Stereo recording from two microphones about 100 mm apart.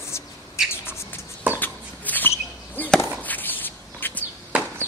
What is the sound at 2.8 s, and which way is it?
Chop, 15° left (ahead or behind).